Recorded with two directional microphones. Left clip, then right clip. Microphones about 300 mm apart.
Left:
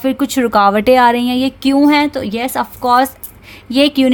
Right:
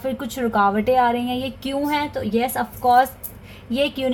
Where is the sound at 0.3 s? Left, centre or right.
Left.